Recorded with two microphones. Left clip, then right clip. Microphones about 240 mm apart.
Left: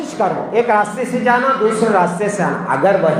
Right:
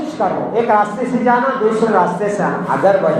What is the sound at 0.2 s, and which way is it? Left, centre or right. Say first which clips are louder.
A woman's voice: left 1 dB; left.